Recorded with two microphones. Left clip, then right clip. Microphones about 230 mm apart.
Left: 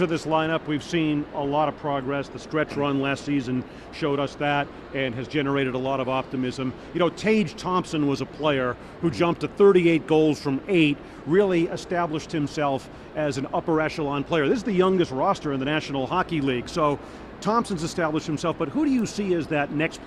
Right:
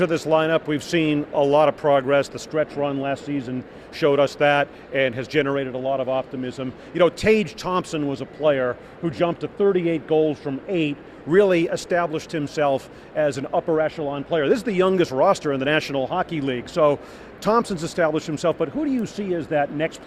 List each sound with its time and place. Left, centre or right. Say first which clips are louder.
0.0 s speech: right 4 dB; centre; by 2.4 s right
2.5 s speech: right 2 dB; centre
3.9 s speech: right 8 dB; right
5.5 s speech: right 1 dB; centre
6.9 s a man's voice: right 5 dB; centre
11.3 s a man's voice: right 4 dB; centre
14.5 s a man's voice: right 3 dB; centre